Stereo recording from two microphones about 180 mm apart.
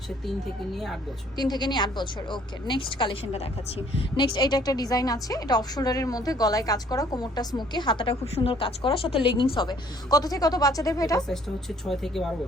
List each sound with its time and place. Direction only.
0.7 s speech: centre (ahead or behind)
1.4 s a woman's voice: 25° left (ahead or behind)
11.3 s speech: centre (ahead or behind)